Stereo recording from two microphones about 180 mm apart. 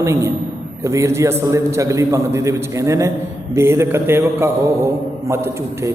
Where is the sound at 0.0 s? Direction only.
15° right (ahead or behind).